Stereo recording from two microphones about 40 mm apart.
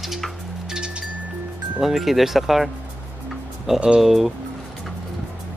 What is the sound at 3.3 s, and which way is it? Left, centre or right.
Music, centre.